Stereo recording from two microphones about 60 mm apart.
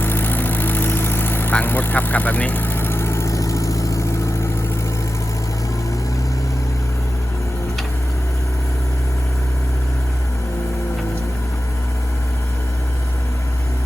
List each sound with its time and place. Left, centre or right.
0.0 s vehicle: left